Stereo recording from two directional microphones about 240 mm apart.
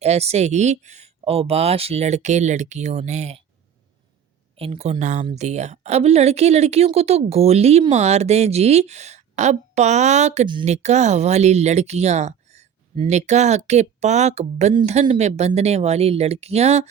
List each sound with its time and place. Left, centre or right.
0.0 s a woman's voice: right
4.5 s a woman's voice: right